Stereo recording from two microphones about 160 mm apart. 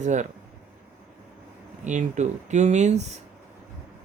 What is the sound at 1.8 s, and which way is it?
Speech, 50° right (ahead or behind).